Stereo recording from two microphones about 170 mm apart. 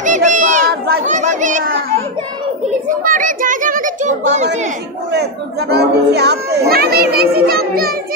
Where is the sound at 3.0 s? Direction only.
50° right (ahead or behind).